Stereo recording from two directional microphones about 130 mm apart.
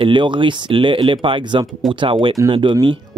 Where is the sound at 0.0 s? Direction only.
40° right (ahead or behind).